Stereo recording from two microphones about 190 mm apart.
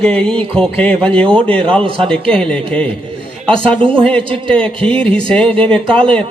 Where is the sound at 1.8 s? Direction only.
30° right (ahead or behind).